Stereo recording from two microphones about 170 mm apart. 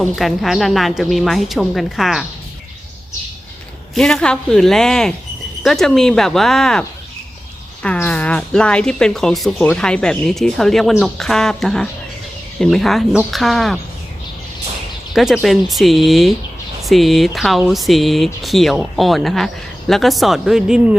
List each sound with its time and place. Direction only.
0.2 s speech: centre (ahead or behind)
3.9 s speech: 5° left (ahead or behind)
15.1 s speech: centre (ahead or behind)